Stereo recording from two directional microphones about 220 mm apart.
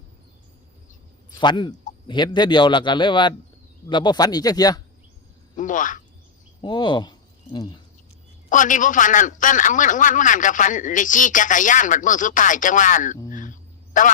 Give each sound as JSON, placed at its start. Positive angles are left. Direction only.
{"t": 1.4, "sound": "a man's voice", "side_deg": 20}
{"t": 5.5, "sound": "a man's voice", "side_deg": 35}
{"t": 6.6, "sound": "a man's voice", "side_deg": 20}
{"t": 8.4, "sound": "a man's voice", "side_deg": 35}